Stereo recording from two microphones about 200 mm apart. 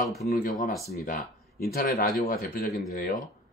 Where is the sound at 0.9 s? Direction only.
50° left (ahead or behind).